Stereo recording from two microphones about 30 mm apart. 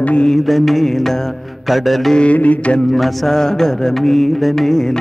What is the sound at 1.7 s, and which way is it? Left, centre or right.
Music, centre.